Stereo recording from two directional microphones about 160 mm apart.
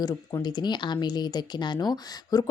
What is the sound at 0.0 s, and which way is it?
Speech, 25° left (ahead or behind).